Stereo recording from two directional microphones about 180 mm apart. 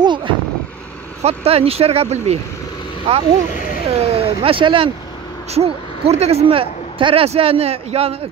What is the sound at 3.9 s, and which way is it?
Speech, 35° right (ahead or behind).